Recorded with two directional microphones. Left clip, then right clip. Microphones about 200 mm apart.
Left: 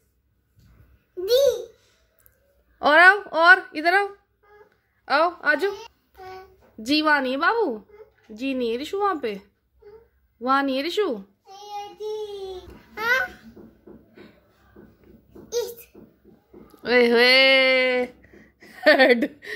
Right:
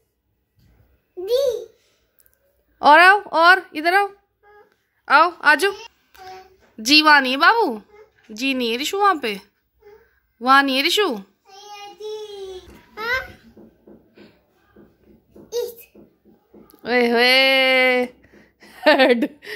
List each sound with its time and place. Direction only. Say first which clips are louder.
1.2 s babbling: left 1 dB; 5° left (ahead or behind)
2.8 s a woman's voice: right 3 dB; 15° right (ahead or behind)
6.1 s child singing: even; 10° right (ahead or behind)
6.8 s speech: right 8 dB; 10° right (ahead or behind)
12.9 s babbling: left 2 dB; 5° right (ahead or behind)
14.1 s a sound: even; 10° right (ahead or behind)
16.8 s speech: even; 10° right (ahead or behind)